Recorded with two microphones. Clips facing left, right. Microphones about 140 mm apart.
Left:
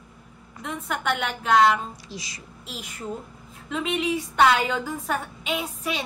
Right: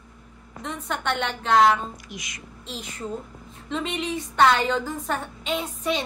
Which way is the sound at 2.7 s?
5° left (ahead or behind).